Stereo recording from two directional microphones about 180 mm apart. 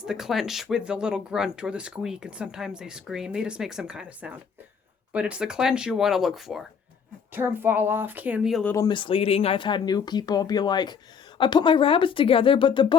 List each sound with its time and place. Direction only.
0.0 s speech: 5° right (ahead or behind)
7.3 s speech: 10° right (ahead or behind)
8.6 s speech: 15° left (ahead or behind)